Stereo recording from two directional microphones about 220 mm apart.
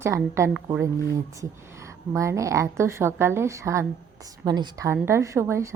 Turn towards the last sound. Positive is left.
turn(degrees=-10)  # may be behind; listen again after turning